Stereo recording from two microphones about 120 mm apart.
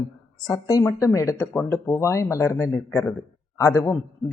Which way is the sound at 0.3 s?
30° left (ahead or behind).